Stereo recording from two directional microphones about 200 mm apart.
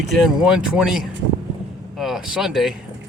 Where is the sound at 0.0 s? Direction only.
Centre (ahead or behind).